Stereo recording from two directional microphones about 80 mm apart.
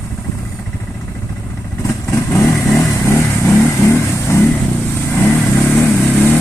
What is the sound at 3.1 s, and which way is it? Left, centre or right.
Vehicle, left.